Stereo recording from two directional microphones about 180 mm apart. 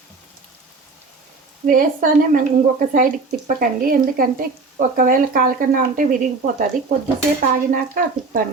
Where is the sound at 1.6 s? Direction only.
50° right (ahead or behind).